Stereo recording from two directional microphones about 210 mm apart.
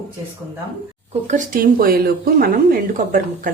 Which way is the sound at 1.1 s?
35° right (ahead or behind).